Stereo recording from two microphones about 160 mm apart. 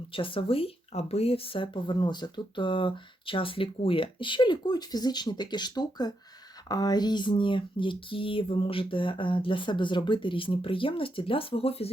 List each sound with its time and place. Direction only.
0.1 s speech: 35° left (ahead or behind)